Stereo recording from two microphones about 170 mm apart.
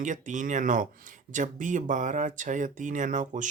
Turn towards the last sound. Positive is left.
turn(degrees=-50)  # may be behind; listen again after turning